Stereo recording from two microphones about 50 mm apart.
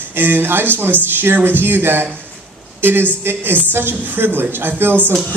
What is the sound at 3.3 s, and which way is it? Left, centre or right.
Speech, right.